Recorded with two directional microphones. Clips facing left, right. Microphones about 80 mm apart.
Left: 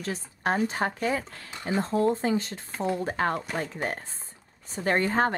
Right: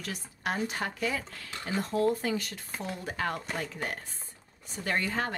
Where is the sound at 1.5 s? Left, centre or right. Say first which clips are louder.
Left 5 dB; left.